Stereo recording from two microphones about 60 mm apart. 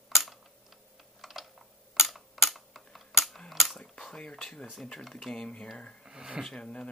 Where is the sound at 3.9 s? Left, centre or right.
Centre.